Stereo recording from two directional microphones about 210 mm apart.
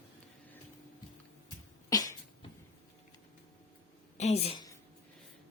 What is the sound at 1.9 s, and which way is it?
Cough, 15° left (ahead or behind).